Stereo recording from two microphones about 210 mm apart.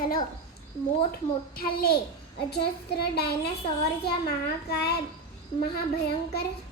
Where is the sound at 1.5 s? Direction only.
45° left (ahead or behind).